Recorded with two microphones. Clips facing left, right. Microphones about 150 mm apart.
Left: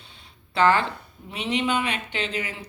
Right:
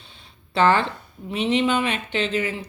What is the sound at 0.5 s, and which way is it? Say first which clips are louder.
Speech: right 2 dB; 25° right (ahead or behind).